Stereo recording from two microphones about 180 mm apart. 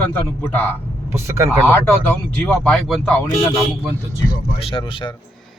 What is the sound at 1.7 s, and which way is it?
Speech, 5° left (ahead or behind).